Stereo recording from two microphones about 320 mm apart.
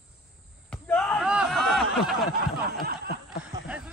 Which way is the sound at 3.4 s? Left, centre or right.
Centre.